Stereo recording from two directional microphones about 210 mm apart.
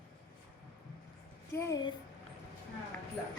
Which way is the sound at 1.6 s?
15° left (ahead or behind).